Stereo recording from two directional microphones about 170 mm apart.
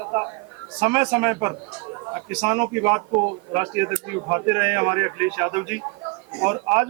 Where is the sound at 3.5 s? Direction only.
15° right (ahead or behind).